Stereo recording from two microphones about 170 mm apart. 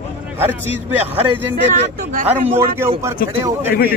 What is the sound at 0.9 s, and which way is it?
Speech, 10° right (ahead or behind).